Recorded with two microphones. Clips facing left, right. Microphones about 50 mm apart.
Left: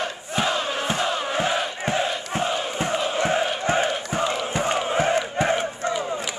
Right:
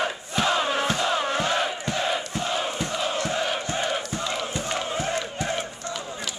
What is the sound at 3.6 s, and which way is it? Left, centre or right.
Crowd, left.